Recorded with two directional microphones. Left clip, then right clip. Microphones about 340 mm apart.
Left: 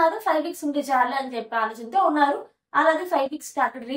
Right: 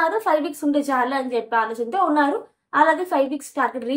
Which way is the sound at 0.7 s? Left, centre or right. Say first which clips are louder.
Right 2 dB; centre.